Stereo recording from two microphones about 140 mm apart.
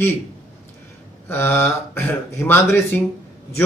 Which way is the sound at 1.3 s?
15° left (ahead or behind).